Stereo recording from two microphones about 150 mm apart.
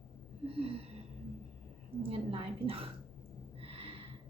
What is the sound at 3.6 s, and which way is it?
Snort, 40° right (ahead or behind).